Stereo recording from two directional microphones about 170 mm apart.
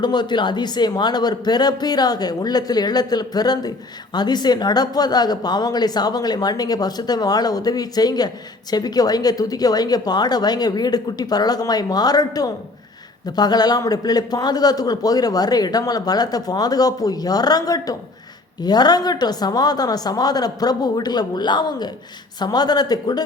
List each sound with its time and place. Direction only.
0.0 s speech: 25° left (ahead or behind)